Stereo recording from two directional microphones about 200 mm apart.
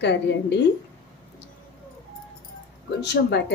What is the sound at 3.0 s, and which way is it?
Speech, 60° left (ahead or behind).